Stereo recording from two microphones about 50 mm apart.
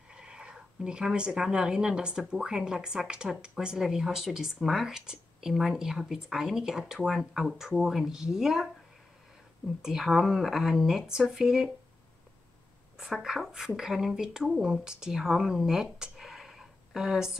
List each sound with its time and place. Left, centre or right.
0.1 s speech: centre
9.8 s speech: centre
12.9 s speech: centre